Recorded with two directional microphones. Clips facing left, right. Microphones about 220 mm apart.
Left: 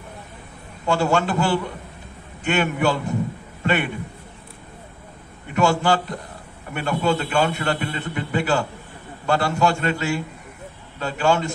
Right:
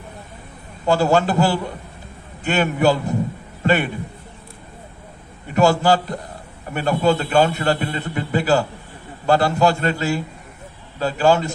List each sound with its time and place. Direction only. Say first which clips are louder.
0.8 s a man's voice: right 3 dB; 40° right (ahead or behind)
5.5 s a man's voice: right 3 dB; 40° right (ahead or behind)